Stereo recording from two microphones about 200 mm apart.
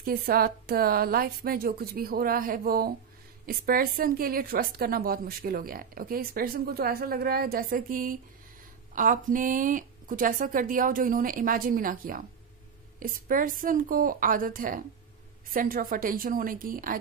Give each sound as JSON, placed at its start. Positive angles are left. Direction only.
{"t": 0.0, "sound": "a woman's voice", "side_deg": -50}